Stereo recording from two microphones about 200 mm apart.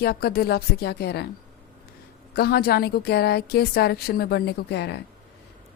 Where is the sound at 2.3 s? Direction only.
50° left (ahead or behind).